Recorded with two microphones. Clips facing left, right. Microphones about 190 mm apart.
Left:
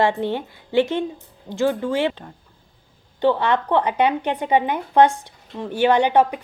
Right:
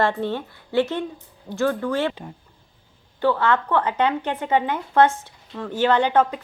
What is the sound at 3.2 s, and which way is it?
A woman's voice, 20° left (ahead or behind).